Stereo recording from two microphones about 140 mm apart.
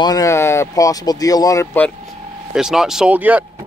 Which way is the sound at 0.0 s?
25° left (ahead or behind).